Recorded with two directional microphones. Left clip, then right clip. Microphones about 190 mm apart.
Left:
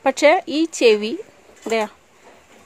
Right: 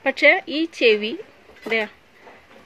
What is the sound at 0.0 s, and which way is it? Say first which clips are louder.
A woman's voice: left 1 dB; 25° left (ahead or behind).